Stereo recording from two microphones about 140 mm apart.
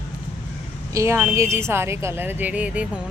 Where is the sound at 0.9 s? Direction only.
20° right (ahead or behind).